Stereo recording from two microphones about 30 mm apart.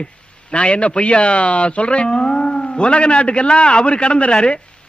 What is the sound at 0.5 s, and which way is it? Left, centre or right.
Speech, left.